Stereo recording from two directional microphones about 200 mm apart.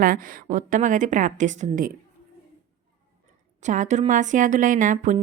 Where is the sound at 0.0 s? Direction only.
45° right (ahead or behind).